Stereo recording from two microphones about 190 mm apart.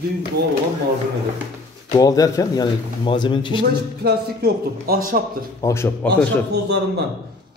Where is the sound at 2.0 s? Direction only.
20° left (ahead or behind).